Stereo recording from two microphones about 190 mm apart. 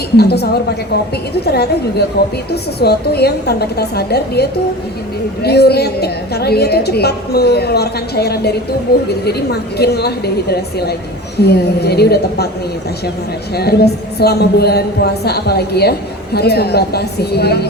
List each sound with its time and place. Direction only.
0.2 s speech: 60° left (ahead or behind)
13.6 s speech: 55° left (ahead or behind)